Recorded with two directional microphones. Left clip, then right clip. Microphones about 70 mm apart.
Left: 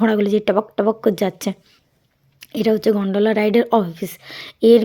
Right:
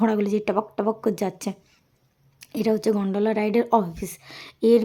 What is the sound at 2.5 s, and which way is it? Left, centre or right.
A woman's voice, left.